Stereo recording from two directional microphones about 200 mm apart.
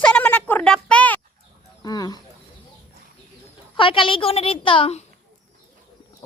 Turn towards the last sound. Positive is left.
turn(degrees=25)  # may be behind; listen again after turning